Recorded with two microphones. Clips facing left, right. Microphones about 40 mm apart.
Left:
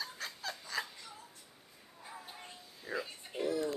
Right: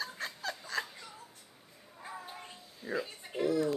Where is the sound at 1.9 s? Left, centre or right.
Right; by 3.6 s centre.